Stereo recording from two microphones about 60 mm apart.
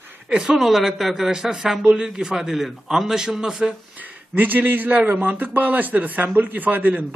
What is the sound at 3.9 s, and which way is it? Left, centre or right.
A man's voice, right.